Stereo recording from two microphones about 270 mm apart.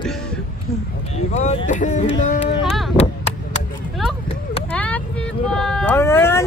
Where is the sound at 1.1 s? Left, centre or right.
Left.